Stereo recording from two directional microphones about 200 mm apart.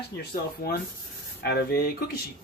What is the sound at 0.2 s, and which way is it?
Speech, 50° left (ahead or behind).